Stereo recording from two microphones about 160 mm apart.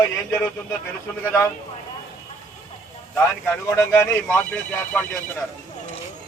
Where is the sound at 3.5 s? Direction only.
15° left (ahead or behind).